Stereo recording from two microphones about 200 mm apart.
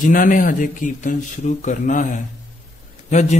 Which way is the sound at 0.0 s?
40° left (ahead or behind).